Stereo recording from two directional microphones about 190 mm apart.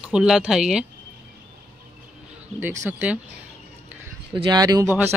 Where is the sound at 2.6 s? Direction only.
10° right (ahead or behind).